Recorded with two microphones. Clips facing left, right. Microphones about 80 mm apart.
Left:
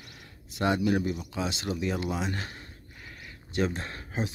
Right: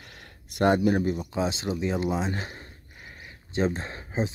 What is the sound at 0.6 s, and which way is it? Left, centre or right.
Speech, right.